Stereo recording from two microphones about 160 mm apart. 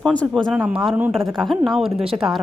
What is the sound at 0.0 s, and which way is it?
Speech, 5° left (ahead or behind).